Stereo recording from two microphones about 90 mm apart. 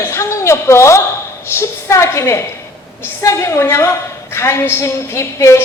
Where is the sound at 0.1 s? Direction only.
30° left (ahead or behind).